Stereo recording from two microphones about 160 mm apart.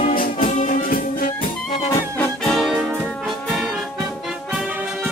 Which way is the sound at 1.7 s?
40° left (ahead or behind).